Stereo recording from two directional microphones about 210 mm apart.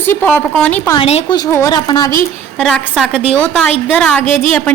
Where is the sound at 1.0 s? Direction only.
30° left (ahead or behind).